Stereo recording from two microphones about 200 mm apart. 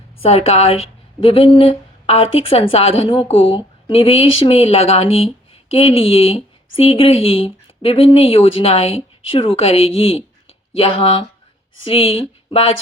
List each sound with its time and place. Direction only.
0.2 s speech: 30° left (ahead or behind)